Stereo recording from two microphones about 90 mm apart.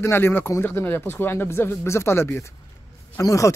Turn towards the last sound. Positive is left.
turn(degrees=40)  # may be behind; listen again after turning